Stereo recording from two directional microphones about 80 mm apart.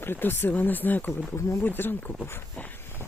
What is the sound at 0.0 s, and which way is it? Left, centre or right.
Speech, left.